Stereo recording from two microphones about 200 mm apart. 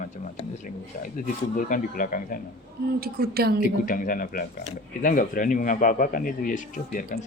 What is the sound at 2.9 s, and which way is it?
Speech, 50° right (ahead or behind).